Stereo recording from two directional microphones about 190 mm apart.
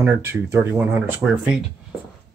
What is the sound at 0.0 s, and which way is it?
Speech, 15° right (ahead or behind).